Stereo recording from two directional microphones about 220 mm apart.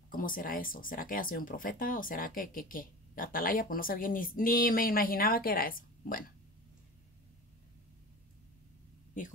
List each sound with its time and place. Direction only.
0.1 s speech: 40° left (ahead or behind)